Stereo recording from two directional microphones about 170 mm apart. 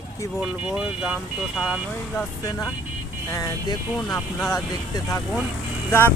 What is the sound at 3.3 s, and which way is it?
Speech, 20° left (ahead or behind).